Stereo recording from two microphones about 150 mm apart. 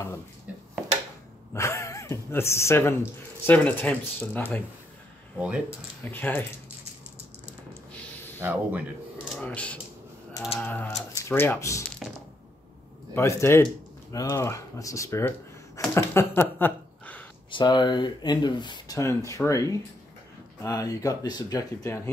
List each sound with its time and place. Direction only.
1.5 s speech: 20° left (ahead or behind)
5.4 s speech: 5° right (ahead or behind)
6.0 s speech: 15° left (ahead or behind)
8.4 s speech: 15° right (ahead or behind)
9.4 s speech: 10° left (ahead or behind)
12.0 s a sound: centre (ahead or behind)
13.1 s speech: 15° left (ahead or behind)
17.5 s speech: 30° left (ahead or behind)